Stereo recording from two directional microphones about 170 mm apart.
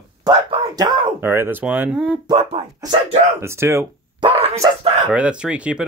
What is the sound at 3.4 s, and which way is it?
Speech, 15° right (ahead or behind).